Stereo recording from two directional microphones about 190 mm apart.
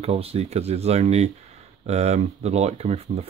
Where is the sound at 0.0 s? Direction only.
30° right (ahead or behind).